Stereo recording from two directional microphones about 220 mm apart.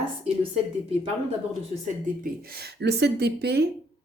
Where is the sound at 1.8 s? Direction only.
45° right (ahead or behind).